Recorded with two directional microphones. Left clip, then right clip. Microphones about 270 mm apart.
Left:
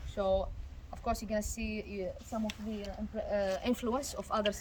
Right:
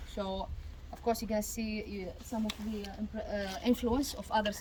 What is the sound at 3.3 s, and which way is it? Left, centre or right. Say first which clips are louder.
Speech: left 1 dB; centre.